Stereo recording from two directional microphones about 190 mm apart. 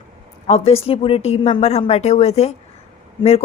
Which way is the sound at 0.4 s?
35° left (ahead or behind).